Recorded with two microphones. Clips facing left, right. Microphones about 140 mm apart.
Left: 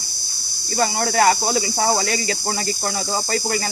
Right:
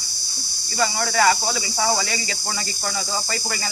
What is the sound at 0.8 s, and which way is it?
Speech, 40° left (ahead or behind).